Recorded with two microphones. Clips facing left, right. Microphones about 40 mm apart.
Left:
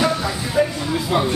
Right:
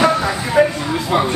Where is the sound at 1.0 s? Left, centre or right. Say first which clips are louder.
Right 3 dB; centre.